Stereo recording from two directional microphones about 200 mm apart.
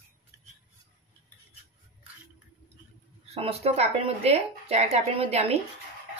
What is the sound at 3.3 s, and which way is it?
Speech, 30° right (ahead or behind).